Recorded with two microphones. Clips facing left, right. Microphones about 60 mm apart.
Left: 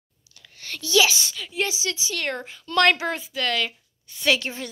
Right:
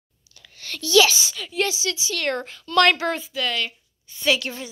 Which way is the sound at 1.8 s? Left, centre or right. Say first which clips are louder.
Right 1 dB; left.